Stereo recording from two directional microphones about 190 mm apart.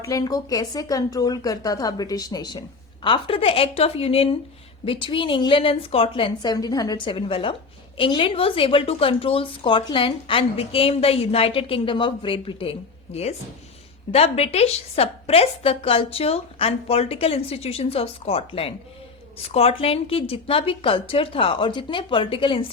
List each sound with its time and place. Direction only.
0.0 s a woman's voice: 20° left (ahead or behind)